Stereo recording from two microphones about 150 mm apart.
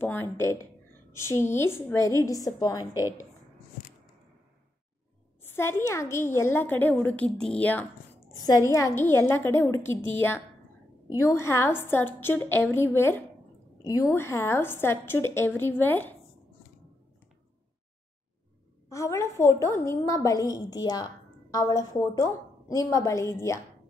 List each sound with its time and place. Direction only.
0.0 s a woman's voice: 15° left (ahead or behind)
5.5 s a woman's voice: 15° left (ahead or behind)
8.6 s a woman's voice: 20° left (ahead or behind)
18.9 s a woman's voice: 20° left (ahead or behind)